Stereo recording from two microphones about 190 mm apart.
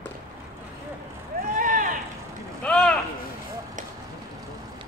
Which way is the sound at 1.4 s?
45° right (ahead or behind).